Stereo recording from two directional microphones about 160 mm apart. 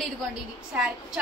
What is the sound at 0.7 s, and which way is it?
Speech, 5° right (ahead or behind).